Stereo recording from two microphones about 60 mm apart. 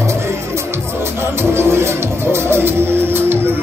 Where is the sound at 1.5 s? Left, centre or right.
Right.